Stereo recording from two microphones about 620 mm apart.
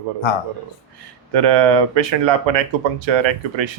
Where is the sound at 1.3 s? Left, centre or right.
Right.